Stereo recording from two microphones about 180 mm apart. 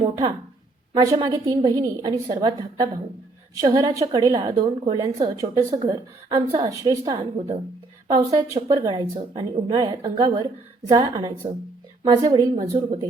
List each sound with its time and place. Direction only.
0.0 s a sound: 25° right (ahead or behind)
1.0 s a woman's voice: 20° right (ahead or behind)
12.7 s speech: 30° right (ahead or behind)